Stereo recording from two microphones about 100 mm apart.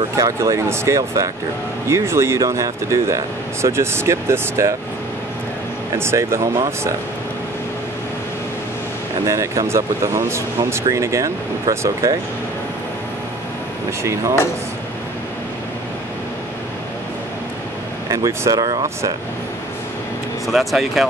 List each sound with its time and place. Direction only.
0.1 s speech: 30° right (ahead or behind)
5.9 s speech: 25° right (ahead or behind)
9.2 s speech: 35° right (ahead or behind)
18.1 s speech: 30° right (ahead or behind)
20.4 s speech: centre (ahead or behind)